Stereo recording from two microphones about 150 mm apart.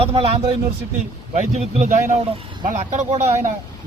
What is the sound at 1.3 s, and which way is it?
Speech, 55° right (ahead or behind).